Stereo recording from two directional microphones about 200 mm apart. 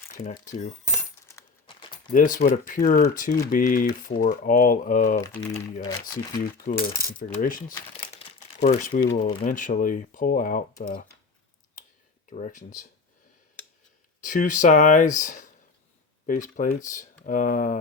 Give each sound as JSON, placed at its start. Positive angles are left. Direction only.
{"t": 1.4, "sound": "a sound", "side_deg": 25}
{"t": 2.1, "sound": "speech", "side_deg": 45}
{"t": 6.4, "sound": "speech", "side_deg": 45}
{"t": 8.1, "sound": "crumpling", "side_deg": 35}
{"t": 9.1, "sound": "speech", "side_deg": 30}
{"t": 9.4, "sound": "speech", "side_deg": 40}
{"t": 12.3, "sound": "speech", "side_deg": 40}
{"t": 14.2, "sound": "speech", "side_deg": 40}